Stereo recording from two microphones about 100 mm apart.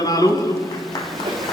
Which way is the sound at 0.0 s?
40° left (ahead or behind).